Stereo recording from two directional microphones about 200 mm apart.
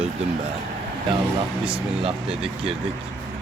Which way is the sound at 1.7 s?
25° right (ahead or behind).